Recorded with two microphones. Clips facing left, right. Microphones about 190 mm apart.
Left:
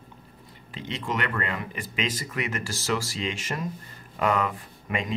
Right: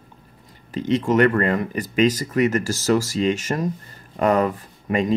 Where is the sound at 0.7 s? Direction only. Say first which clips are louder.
Right 13 dB; 45° right (ahead or behind).